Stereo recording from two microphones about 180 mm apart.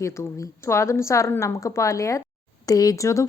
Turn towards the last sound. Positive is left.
turn(degrees=15)  # may be behind; listen again after turning